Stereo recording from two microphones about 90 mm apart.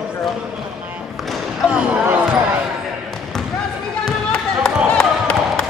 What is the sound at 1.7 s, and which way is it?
Basketball bounce, 15° right (ahead or behind).